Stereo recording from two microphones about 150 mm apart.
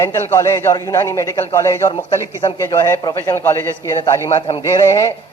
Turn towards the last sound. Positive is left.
turn(degrees=20)  # may be behind; listen again after turning